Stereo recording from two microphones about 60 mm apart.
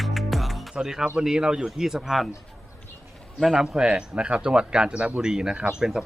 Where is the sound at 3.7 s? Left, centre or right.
Centre.